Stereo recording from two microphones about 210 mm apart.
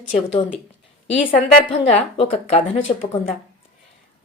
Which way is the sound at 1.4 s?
30° left (ahead or behind).